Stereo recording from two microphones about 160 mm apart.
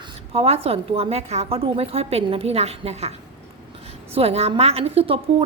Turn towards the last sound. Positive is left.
turn(degrees=-35)  # may be behind; listen again after turning